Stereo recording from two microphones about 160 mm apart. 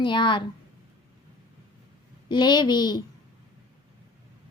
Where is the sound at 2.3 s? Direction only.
25° left (ahead or behind).